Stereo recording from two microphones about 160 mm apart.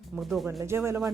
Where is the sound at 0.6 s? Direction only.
15° right (ahead or behind).